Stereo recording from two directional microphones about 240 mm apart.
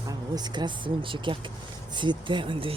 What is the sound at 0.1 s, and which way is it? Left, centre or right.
Speech, centre.